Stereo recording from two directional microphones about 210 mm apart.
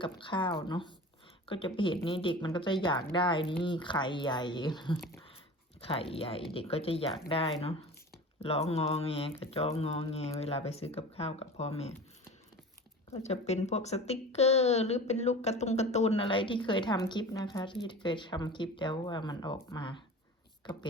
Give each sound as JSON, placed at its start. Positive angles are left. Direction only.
{"t": 0.0, "sound": "speech", "side_deg": 25}
{"t": 13.1, "sound": "a woman's voice", "side_deg": 30}